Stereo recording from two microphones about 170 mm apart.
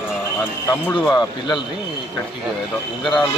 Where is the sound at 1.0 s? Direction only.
Centre (ahead or behind).